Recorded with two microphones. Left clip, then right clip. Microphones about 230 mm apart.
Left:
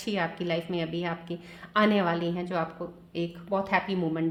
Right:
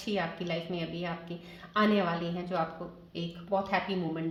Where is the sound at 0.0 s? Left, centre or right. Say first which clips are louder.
Left 3 dB; left.